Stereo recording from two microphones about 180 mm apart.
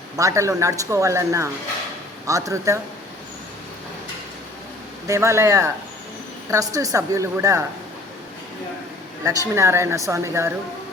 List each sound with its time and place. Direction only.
0.2 s speech: 15° right (ahead or behind)
5.0 s speech: 15° right (ahead or behind)
9.2 s a woman's voice: 20° right (ahead or behind)